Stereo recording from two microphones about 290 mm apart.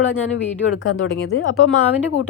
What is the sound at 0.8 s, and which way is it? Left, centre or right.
Speech, left.